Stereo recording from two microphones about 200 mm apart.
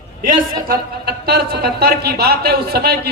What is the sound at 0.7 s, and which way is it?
A woman's voice, 50° right (ahead or behind).